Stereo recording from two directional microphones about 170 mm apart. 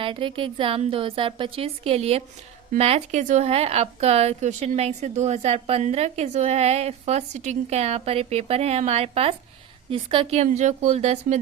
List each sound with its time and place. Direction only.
0.0 s a woman's voice: 30° right (ahead or behind)